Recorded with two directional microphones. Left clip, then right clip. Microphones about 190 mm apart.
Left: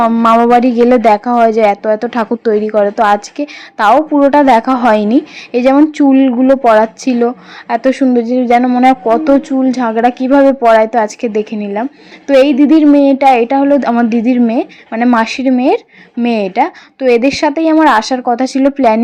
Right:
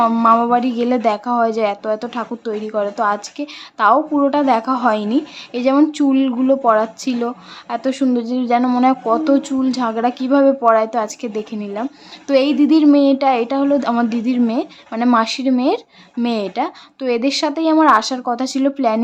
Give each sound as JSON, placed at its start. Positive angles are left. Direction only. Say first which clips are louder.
{"t": 0.0, "sound": "a woman's voice", "louder": "left 4 dB", "side_deg": 20}
{"t": 0.4, "sound": "a woman's voice", "louder": "left 9 dB", "side_deg": 30}